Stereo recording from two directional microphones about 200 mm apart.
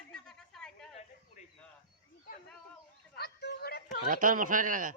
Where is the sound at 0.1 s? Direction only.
5° left (ahead or behind).